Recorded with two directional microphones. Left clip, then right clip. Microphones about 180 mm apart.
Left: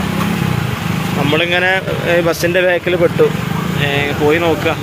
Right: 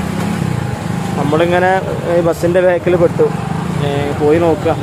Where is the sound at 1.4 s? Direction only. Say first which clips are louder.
Right 3 dB; 15° right (ahead or behind).